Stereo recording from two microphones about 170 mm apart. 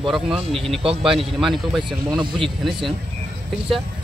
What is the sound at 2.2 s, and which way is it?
Speech, 30° right (ahead or behind).